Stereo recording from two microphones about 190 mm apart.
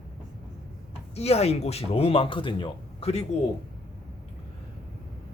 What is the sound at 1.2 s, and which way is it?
Speech, 35° left (ahead or behind).